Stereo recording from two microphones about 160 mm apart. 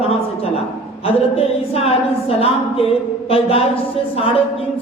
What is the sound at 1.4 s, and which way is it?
A woman's voice, 40° left (ahead or behind).